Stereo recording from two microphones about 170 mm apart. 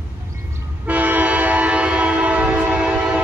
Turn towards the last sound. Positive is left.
turn(degrees=-5)  # may be behind; listen again after turning